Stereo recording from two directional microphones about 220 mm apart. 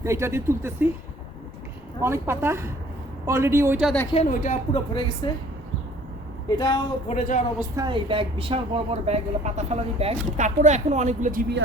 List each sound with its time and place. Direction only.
0.0 s speech: 10° right (ahead or behind)
2.0 s speech: 10° right (ahead or behind)
4.1 s speech: 30° left (ahead or behind)
5.2 s speech: 20° left (ahead or behind)
6.6 s speech: 20° left (ahead or behind)
7.2 s speech: 30° left (ahead or behind)
7.8 s a woman's voice: 25° right (ahead or behind)